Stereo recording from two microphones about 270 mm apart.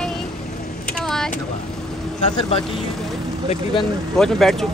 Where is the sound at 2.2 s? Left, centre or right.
Left.